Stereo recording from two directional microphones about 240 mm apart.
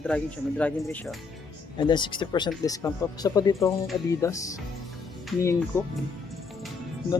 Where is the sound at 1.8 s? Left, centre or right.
Centre.